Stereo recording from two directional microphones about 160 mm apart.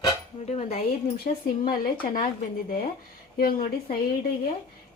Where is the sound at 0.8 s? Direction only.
70° left (ahead or behind).